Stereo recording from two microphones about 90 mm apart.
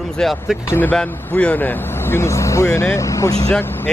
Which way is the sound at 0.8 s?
15° left (ahead or behind).